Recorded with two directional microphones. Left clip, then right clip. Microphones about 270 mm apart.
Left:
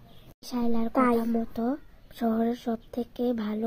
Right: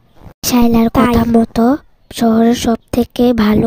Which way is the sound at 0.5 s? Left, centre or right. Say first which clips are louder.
Right 15 dB; right.